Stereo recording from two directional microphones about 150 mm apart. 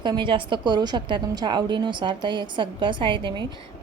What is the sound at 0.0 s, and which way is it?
A woman's voice, 30° right (ahead or behind).